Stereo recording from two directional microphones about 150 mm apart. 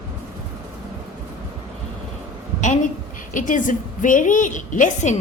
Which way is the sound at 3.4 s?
60° left (ahead or behind).